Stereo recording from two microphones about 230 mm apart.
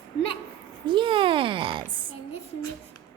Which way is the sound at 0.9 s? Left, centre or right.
Right.